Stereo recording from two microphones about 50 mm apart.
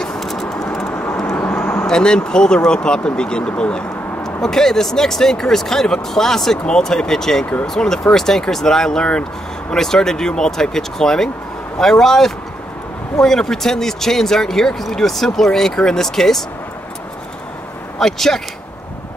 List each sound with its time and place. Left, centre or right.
0.0 s a sound: centre
1.3 s vehicle: left
1.9 s speech: centre
17.9 s speech: centre